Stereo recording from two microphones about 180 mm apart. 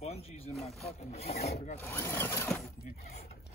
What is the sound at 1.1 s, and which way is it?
Wood, 35° left (ahead or behind).